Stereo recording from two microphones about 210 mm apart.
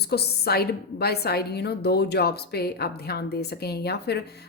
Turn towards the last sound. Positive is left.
turn(degrees=50)  # may be behind; listen again after turning